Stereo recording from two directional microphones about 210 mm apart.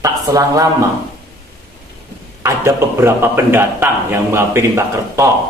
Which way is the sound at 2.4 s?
10° right (ahead or behind).